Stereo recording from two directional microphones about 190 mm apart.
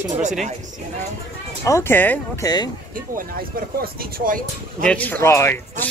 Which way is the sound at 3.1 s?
50° right (ahead or behind).